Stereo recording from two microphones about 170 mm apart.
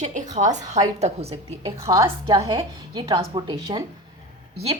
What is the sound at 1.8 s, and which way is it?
A woman's voice, 20° right (ahead or behind).